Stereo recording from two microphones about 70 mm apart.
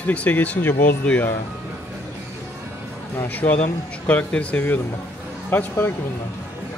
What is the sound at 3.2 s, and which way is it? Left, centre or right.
Speech, left.